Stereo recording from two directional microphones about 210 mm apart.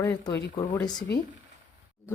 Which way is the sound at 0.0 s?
15° left (ahead or behind).